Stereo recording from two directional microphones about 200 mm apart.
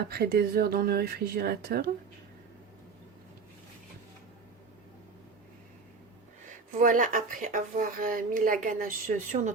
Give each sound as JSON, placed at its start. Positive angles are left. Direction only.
{"t": 0.1, "sound": "speech", "side_deg": -50}
{"t": 6.5, "sound": "speech", "side_deg": -40}